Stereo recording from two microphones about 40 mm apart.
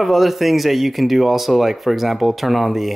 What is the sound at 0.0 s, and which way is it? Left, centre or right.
Speech, centre.